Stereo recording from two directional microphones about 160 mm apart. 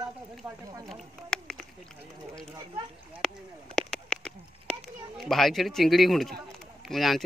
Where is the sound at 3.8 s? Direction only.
5° left (ahead or behind).